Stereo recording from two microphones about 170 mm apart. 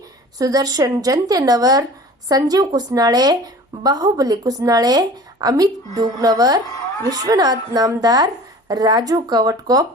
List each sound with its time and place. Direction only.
0.3 s a woman's voice: 20° right (ahead or behind)